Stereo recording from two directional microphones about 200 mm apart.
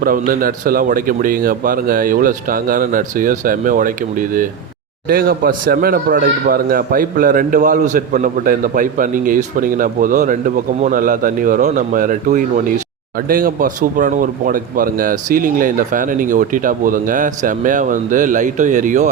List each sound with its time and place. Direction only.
0.0 s speech: 45° right (ahead or behind)